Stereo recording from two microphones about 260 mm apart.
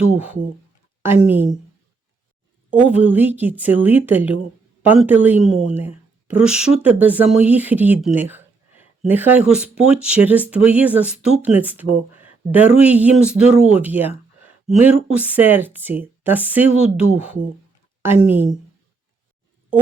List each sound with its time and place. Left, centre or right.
1.0 s a woman's voice: centre
2.6 s a woman's voice: centre